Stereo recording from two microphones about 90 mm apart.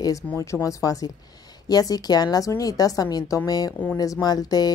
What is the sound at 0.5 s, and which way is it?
A woman's voice, 35° left (ahead or behind).